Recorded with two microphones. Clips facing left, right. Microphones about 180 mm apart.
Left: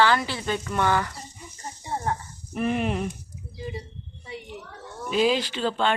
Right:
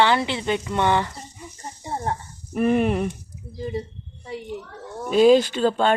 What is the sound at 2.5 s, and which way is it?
Speech, 50° right (ahead or behind).